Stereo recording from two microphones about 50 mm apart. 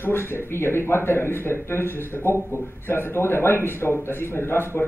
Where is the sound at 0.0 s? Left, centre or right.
Left.